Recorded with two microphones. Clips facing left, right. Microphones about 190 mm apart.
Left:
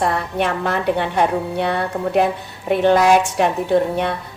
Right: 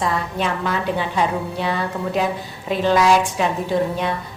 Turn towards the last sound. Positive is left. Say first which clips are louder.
# left 3 dB
turn(degrees=60)  # may be behind; listen again after turning